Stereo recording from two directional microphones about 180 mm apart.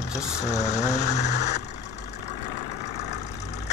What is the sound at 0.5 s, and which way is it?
Vehicle, 40° left (ahead or behind).